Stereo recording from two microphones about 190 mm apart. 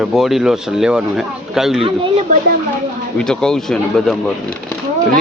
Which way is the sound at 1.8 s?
30° right (ahead or behind).